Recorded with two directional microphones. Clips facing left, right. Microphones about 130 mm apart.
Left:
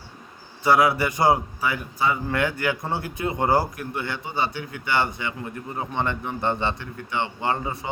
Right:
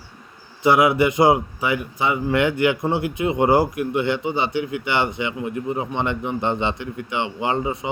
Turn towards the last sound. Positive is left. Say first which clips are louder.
# right 3 dB
turn(degrees=-15)  # may be behind; listen again after turning